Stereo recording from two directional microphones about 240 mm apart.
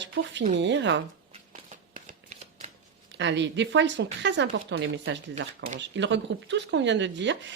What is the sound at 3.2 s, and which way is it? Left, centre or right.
Speech, right.